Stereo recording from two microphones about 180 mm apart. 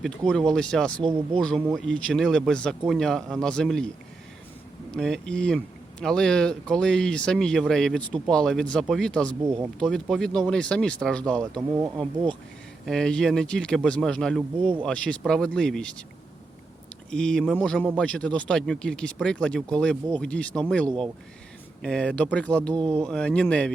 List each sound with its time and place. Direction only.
0.0 s speech: 5° left (ahead or behind)
4.9 s speech: 5° left (ahead or behind)
12.8 s speech: 5° left (ahead or behind)
14.6 s speech: 30° right (ahead or behind)
14.8 s speech: 5° left (ahead or behind)
17.1 s speech: 5° left (ahead or behind)